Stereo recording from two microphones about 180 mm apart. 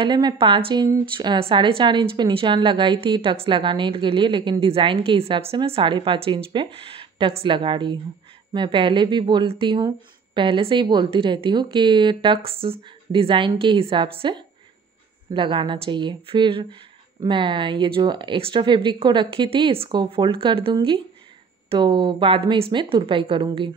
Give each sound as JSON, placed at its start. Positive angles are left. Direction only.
{"t": 0.0, "sound": "a woman's voice", "side_deg": -25}